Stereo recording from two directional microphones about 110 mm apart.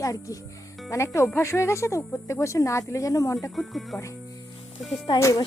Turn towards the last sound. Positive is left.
turn(degrees=30)  # may be behind; listen again after turning